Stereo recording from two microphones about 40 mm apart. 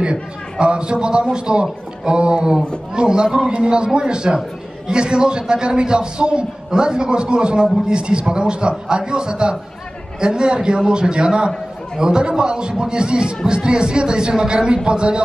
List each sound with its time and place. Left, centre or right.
0.0 s a man's voice: right